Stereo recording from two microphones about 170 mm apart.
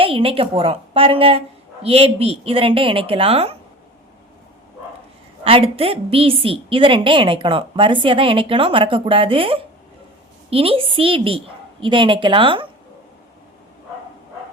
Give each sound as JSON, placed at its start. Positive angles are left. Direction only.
{"t": 0.0, "sound": "a woman's voice", "side_deg": -30}
{"t": 5.4, "sound": "a woman's voice", "side_deg": -35}